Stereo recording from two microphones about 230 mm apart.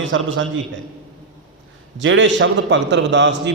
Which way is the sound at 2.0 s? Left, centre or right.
Right.